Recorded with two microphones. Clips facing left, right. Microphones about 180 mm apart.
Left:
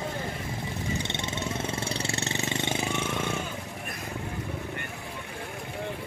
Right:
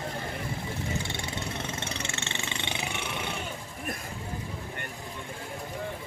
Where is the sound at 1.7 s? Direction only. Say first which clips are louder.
Left 4 dB; 30° left (ahead or behind).